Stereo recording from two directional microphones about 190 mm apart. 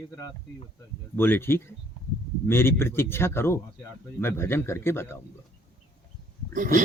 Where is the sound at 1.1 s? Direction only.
10° left (ahead or behind).